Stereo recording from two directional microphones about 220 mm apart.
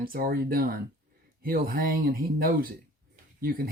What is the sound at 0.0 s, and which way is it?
Speech, 40° right (ahead or behind).